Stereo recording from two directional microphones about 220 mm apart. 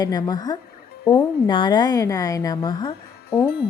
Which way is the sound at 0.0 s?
15° left (ahead or behind).